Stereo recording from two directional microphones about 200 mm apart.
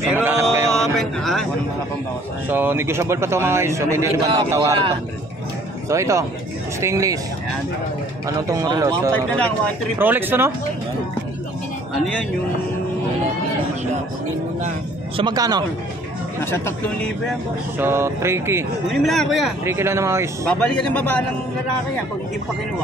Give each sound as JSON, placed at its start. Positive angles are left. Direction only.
{"t": 0.1, "sound": "mantra", "side_deg": -10}
{"t": 0.7, "sound": "a sound", "side_deg": 5}
{"t": 2.5, "sound": "a man's voice", "side_deg": -10}
{"t": 5.9, "sound": "a man's voice", "side_deg": -15}
{"t": 8.5, "sound": "a man's voice", "side_deg": -15}
{"t": 15.1, "sound": "speech", "side_deg": -20}
{"t": 16.4, "sound": "speech", "side_deg": 10}
{"t": 17.7, "sound": "a man's voice", "side_deg": -10}
{"t": 18.9, "sound": "speech", "side_deg": 0}
{"t": 19.6, "sound": "a man's voice", "side_deg": -10}
{"t": 20.4, "sound": "speech", "side_deg": 5}